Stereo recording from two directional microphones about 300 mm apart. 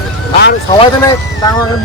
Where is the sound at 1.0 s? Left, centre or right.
Centre.